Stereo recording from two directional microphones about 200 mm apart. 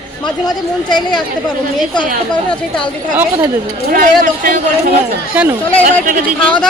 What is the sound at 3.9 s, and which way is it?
Speech, 45° right (ahead or behind).